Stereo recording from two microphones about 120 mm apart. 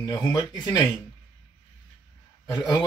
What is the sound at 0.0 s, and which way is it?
Speech, 35° left (ahead or behind).